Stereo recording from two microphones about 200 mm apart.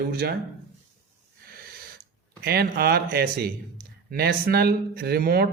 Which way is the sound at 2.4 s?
50° right (ahead or behind).